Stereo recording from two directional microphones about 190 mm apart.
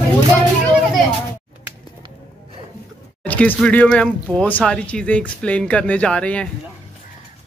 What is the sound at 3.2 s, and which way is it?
Speech, 10° left (ahead or behind).